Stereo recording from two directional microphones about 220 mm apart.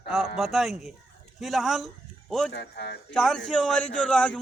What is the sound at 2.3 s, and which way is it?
Speech, centre (ahead or behind).